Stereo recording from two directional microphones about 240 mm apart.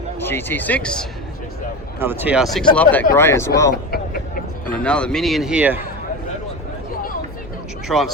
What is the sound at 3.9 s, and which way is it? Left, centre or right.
Vehicle, left.